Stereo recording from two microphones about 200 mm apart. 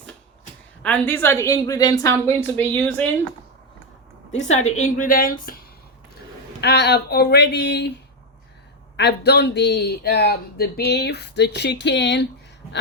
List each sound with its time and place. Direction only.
0.8 s a woman's voice: 10° left (ahead or behind)
4.3 s a woman's voice: 35° left (ahead or behind)
4.9 s speech: 45° left (ahead or behind)
9.0 s speech: 55° left (ahead or behind)